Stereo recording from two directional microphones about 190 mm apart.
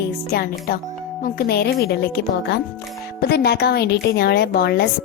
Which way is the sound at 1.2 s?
55° left (ahead or behind).